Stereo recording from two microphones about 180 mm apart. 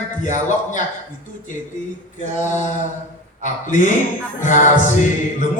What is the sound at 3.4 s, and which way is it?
Music, 45° left (ahead or behind).